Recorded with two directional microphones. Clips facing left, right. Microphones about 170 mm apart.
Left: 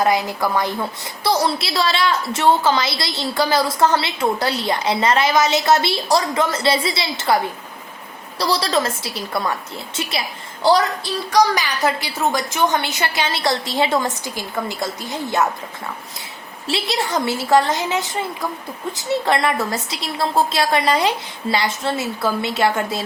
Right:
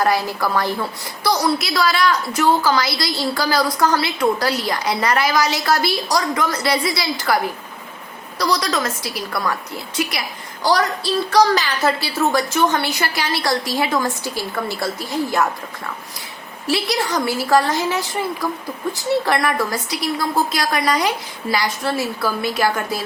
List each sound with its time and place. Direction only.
0.0 s a woman's voice: 20° left (ahead or behind)
16.6 s a woman's voice: 25° left (ahead or behind)